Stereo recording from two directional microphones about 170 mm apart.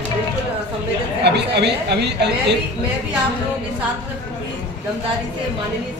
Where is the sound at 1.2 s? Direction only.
80° right.